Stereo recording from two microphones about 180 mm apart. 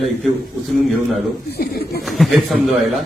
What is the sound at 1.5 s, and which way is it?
Speech, 60° left (ahead or behind).